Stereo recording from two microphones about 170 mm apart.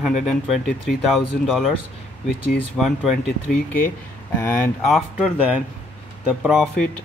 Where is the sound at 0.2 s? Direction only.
Centre (ahead or behind).